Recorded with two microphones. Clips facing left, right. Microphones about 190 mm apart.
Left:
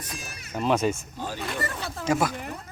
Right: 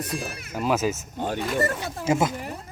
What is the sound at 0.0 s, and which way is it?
Speech, 55° right (ahead or behind).